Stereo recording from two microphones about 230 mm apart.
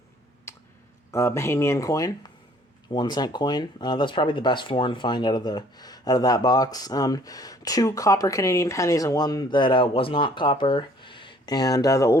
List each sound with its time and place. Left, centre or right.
0.5 s clicking: centre
1.1 s speech: centre